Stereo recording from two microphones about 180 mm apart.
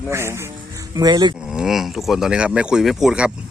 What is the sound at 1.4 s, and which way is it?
Speech, 5° right (ahead or behind).